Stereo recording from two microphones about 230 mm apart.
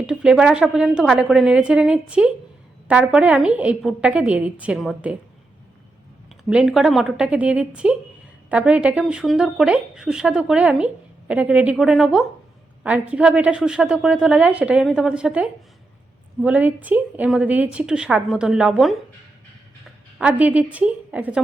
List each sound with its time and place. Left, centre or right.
0.0 s speech: centre
6.5 s speech: centre
20.1 s speech: centre